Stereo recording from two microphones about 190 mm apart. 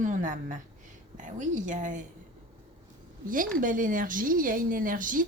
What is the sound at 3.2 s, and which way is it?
Speech, 45° right (ahead or behind).